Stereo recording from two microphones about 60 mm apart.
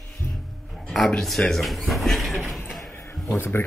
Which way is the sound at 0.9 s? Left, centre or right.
Centre.